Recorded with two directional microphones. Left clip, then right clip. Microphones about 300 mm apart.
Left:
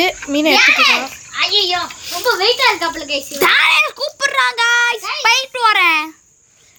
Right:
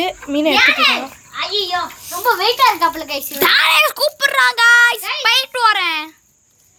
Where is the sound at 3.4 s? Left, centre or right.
Centre.